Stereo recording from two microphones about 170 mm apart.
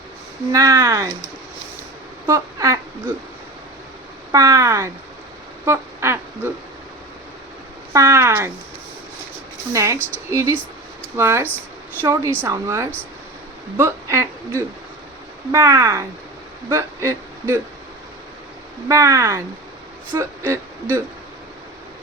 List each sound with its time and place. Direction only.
0.5 s speech: 20° right (ahead or behind)
2.2 s speech: 20° right (ahead or behind)
4.3 s speech: 20° right (ahead or behind)
5.6 s quack: 15° right (ahead or behind)
7.9 s speech: 15° right (ahead or behind)
9.7 s speech: 15° right (ahead or behind)
16.6 s a sound: 15° right (ahead or behind)
18.9 s speech: 20° right (ahead or behind)